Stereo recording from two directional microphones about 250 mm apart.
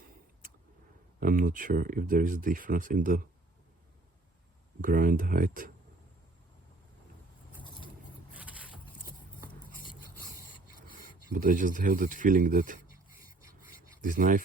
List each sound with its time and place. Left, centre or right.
1.2 s speech: right
4.8 s speech: right
8.3 s vehicle: centre
11.3 s speech: right
12.9 s writing: left
13.6 s rub: left
14.0 s speech: right